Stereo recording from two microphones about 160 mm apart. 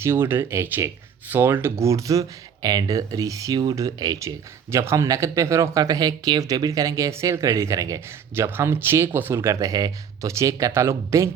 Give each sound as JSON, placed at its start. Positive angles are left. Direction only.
{"t": 0.0, "sound": "speech", "side_deg": -15}